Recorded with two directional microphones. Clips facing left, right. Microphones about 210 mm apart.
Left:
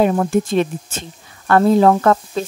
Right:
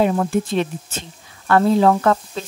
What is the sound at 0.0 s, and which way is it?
Speech, 45° left (ahead or behind).